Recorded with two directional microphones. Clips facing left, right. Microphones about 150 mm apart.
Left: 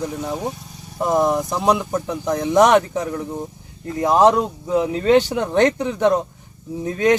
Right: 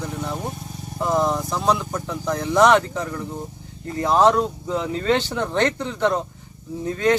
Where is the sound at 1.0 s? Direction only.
20° left (ahead or behind).